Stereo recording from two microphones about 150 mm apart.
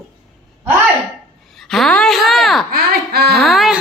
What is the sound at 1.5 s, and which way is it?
Speech, centre (ahead or behind).